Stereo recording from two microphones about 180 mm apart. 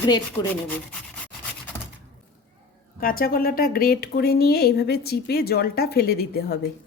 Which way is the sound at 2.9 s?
55° left (ahead or behind).